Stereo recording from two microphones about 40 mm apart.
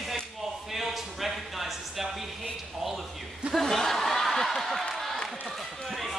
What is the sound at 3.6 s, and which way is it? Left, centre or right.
Chuckle, centre.